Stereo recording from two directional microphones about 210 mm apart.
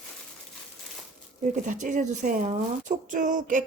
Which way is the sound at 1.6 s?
35° right (ahead or behind).